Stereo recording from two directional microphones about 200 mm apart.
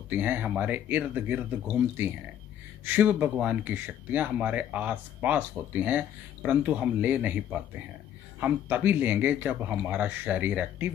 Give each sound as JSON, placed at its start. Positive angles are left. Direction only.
{"t": 0.1, "sound": "speech", "side_deg": -10}